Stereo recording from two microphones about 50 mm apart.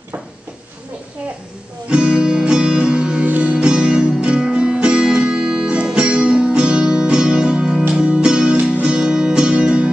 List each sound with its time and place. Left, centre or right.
1.9 s guitar: centre
3.3 s music: right
3.5 s music: centre